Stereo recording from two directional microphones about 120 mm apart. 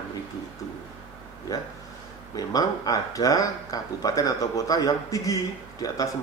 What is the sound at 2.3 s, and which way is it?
Speech, 30° left (ahead or behind).